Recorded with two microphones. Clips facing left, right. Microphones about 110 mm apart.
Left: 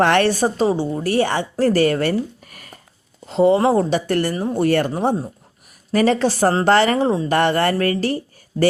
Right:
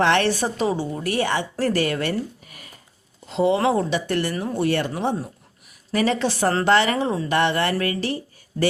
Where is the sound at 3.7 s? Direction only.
40° left (ahead or behind).